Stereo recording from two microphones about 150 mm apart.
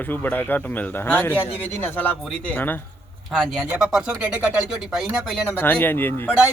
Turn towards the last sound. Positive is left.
turn(degrees=15)  # may be behind; listen again after turning